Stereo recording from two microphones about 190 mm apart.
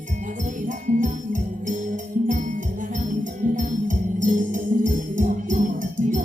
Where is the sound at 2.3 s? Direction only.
40° right (ahead or behind).